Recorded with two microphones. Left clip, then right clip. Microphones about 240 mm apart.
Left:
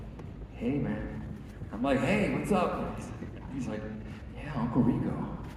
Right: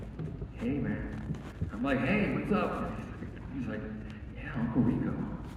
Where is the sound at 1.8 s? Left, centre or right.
Centre.